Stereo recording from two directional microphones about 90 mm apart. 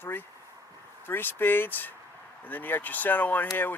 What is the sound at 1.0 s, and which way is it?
Speech, 20° left (ahead or behind).